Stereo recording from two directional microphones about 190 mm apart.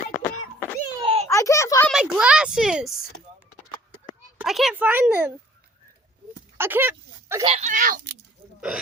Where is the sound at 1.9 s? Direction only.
5° right (ahead or behind).